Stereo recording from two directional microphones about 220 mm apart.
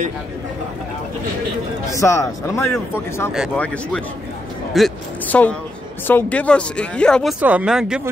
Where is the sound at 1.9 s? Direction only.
15° left (ahead or behind).